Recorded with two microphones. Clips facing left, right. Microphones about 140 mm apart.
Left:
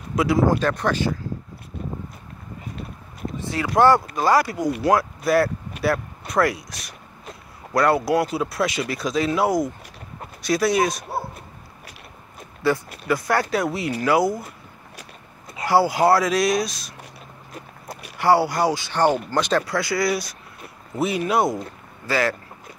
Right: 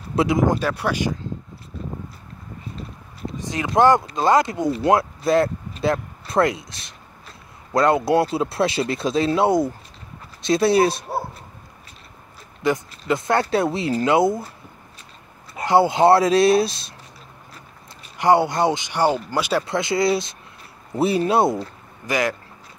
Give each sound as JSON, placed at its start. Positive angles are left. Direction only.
{"t": 0.1, "sound": "a sound", "side_deg": -25}
{"t": 0.4, "sound": "speech", "side_deg": -15}
{"t": 3.3, "sound": "speech", "side_deg": -20}
{"t": 5.8, "sound": "vehicle", "side_deg": -25}
{"t": 7.7, "sound": "speech", "side_deg": -25}
{"t": 12.9, "sound": "speech", "side_deg": -25}
{"t": 15.6, "sound": "speech", "side_deg": -20}
{"t": 18.1, "sound": "speech", "side_deg": -20}
{"t": 19.6, "sound": "speech", "side_deg": -25}